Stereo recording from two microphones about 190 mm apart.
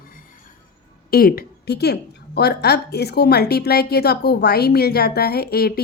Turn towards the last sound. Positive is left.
turn(degrees=55)  # may be behind; listen again after turning